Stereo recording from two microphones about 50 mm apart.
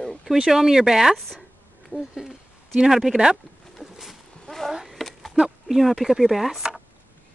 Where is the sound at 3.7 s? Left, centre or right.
Centre.